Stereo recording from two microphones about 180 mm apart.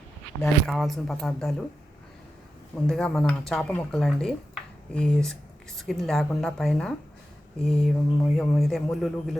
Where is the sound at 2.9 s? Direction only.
5° left (ahead or behind).